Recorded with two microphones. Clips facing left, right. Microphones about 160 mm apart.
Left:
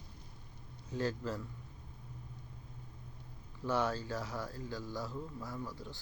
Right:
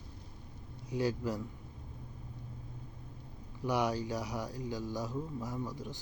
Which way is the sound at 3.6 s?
15° right (ahead or behind).